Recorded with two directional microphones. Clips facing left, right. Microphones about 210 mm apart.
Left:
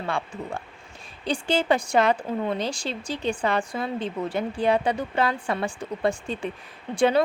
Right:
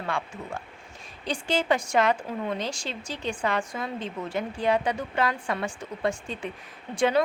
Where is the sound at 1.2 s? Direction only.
30° left (ahead or behind).